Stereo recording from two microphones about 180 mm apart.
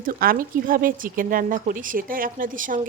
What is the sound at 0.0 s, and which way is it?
A woman's voice, 50° right (ahead or behind).